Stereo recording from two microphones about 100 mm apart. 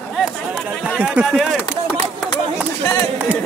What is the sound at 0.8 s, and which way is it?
Speech, 10° right (ahead or behind).